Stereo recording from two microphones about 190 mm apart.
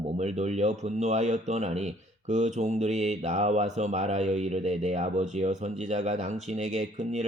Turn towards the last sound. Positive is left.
turn(degrees=-35)  # may be behind; listen again after turning